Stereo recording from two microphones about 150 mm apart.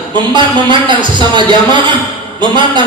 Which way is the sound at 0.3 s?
30° right (ahead or behind).